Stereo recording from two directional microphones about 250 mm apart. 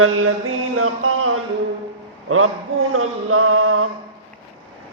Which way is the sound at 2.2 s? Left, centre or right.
Right.